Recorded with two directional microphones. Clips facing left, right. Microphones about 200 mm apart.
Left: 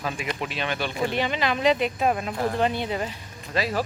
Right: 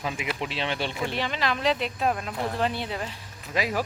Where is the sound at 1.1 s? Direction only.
Centre (ahead or behind).